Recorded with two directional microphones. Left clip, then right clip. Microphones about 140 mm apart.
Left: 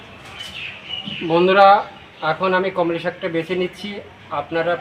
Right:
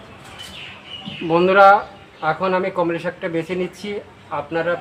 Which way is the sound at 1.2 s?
10° right (ahead or behind).